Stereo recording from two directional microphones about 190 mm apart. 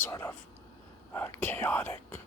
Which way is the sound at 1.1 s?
10° left (ahead or behind).